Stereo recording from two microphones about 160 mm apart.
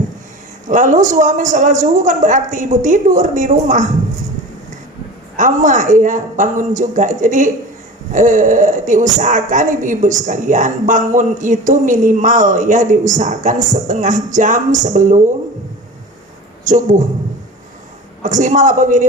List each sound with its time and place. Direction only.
0.7 s a woman's voice: 55° right (ahead or behind)
5.4 s a woman's voice: 50° right (ahead or behind)
16.6 s a woman's voice: 55° right (ahead or behind)
18.2 s a woman's voice: 50° right (ahead or behind)